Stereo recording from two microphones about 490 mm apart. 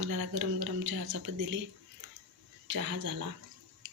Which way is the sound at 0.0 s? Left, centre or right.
Right.